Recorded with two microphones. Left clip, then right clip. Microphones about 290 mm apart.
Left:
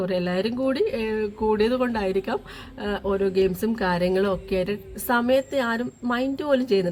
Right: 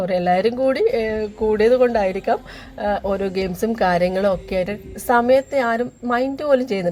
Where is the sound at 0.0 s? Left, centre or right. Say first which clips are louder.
Right 7 dB; centre.